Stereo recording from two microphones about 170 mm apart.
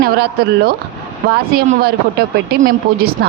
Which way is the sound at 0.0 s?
65° right (ahead or behind).